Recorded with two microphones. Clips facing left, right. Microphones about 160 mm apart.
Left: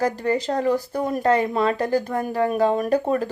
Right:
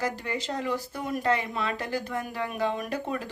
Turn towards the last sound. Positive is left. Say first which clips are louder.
# left 11 dB
turn(degrees=45)  # may be behind; listen again after turning